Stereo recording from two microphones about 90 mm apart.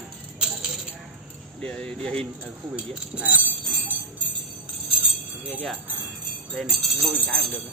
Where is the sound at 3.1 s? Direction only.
15° right (ahead or behind).